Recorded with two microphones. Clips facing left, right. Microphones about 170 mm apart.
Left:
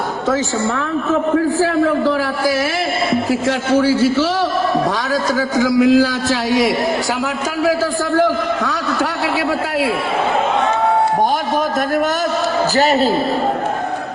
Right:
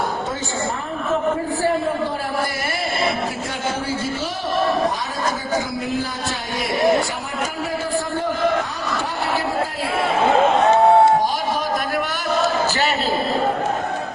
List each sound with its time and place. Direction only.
1.6 s a man's voice: 90° left
3.8 s a man's voice: 90° left
5.5 s a man's voice: 90° left
8.1 s a sound: 90° left
12.7 s a woman's voice: 40° left (ahead or behind)